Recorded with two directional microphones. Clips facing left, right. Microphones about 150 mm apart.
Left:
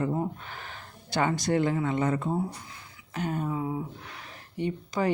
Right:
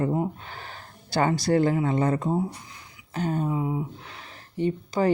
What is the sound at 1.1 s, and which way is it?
Speech, 35° right (ahead or behind).